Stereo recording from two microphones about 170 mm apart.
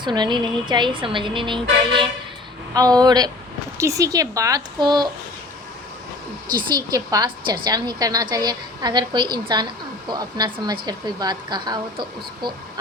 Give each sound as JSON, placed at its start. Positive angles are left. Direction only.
{"t": 0.0, "sound": "a woman's voice", "side_deg": -25}
{"t": 6.7, "sound": "a woman's voice", "side_deg": -20}